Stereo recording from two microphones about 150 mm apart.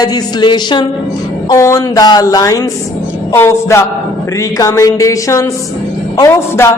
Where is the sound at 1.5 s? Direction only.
20° left (ahead or behind).